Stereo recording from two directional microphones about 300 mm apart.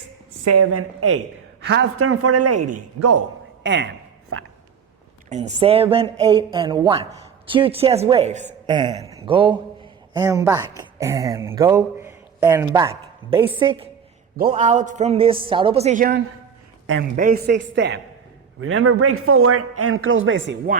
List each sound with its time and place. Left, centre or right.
0.4 s a man's voice: right
1.6 s a man's voice: right
3.6 s a sound: right
5.3 s a man's voice: right
14.3 s a man's voice: right